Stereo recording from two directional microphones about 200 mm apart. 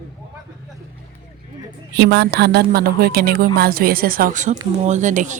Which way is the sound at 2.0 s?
60° right (ahead or behind).